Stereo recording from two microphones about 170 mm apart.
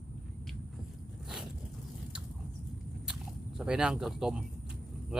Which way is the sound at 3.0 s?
5° right (ahead or behind).